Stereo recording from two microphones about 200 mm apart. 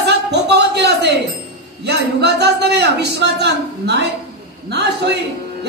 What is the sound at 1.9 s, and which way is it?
Speech, 55° right (ahead or behind).